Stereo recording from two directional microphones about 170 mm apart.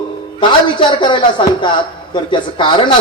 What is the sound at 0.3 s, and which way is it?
Speech, 30° left (ahead or behind).